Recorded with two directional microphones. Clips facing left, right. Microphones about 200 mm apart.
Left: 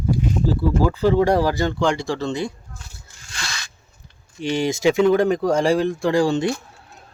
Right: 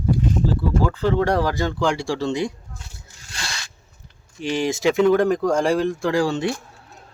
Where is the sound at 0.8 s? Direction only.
10° left (ahead or behind); by 2.8 s 15° right (ahead or behind).